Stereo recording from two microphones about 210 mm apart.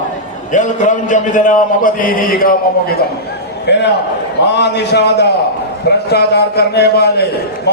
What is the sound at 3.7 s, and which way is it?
A man's voice, 55° left (ahead or behind).